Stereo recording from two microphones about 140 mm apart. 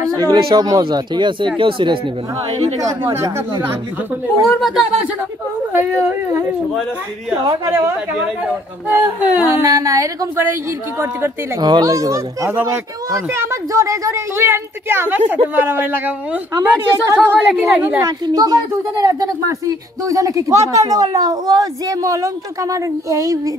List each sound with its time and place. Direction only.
0.3 s speech: 30° right (ahead or behind)
2.8 s speech: 20° right (ahead or behind)
4.5 s speech: centre (ahead or behind)
5.7 s speech: 15° right (ahead or behind)
7.4 s speech: 20° right (ahead or behind)
11.6 s speech: 25° right (ahead or behind)
17.5 s speech: 5° right (ahead or behind)
18.0 s speech: 25° right (ahead or behind)